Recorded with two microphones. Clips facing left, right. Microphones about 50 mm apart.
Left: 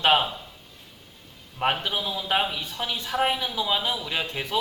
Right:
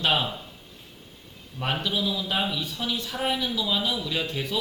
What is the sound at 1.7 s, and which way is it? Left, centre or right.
Speech, left.